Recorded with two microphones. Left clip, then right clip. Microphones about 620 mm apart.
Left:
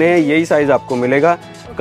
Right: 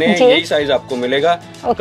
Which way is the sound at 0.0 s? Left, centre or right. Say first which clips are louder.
Right 1 dB; left.